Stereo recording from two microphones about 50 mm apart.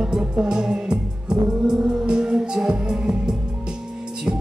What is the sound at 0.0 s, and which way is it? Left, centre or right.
Music, centre.